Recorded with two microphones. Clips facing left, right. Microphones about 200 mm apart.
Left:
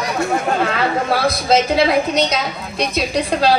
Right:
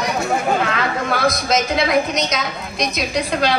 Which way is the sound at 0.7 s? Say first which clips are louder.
Left 3 dB; 30° left (ahead or behind).